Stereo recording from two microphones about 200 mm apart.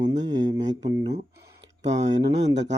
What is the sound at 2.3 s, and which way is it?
Speech, 60° right (ahead or behind).